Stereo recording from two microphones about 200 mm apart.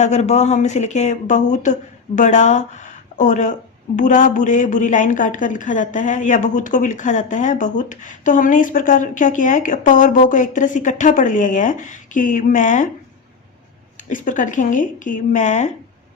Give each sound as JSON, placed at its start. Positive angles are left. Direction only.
{"t": 0.0, "sound": "a woman's voice", "side_deg": 35}
{"t": 14.1, "sound": "a woman's voice", "side_deg": 40}